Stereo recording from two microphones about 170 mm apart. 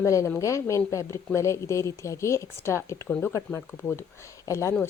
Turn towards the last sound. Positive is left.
turn(degrees=15)  # may be behind; listen again after turning